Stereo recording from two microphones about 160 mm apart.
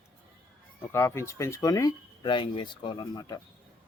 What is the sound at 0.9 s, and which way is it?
Speech, 15° left (ahead or behind).